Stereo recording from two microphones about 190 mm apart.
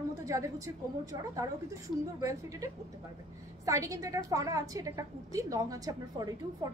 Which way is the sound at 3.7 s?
15° right (ahead or behind).